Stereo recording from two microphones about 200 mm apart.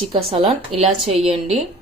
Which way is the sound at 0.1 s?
25° right (ahead or behind).